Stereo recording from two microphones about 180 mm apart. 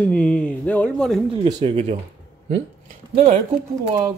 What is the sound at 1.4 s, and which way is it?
Speech, 35° right (ahead or behind).